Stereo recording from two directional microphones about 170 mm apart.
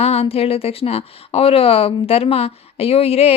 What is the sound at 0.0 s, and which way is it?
Speech, 35° left (ahead or behind).